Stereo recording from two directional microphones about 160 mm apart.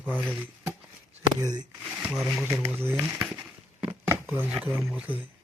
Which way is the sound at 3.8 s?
10° right (ahead or behind).